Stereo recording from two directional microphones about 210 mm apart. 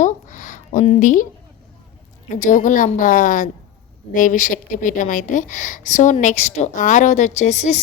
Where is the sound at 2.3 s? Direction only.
35° left (ahead or behind).